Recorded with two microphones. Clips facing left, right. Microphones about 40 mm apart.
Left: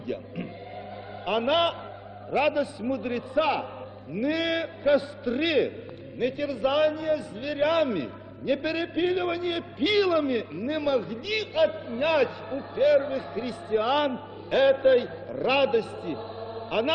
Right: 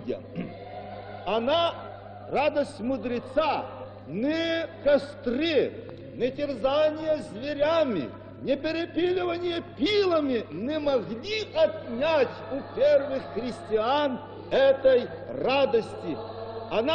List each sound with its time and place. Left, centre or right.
1.2 s a man's voice: left